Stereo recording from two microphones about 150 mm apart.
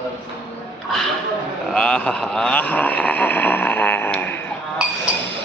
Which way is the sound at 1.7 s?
5° left (ahead or behind).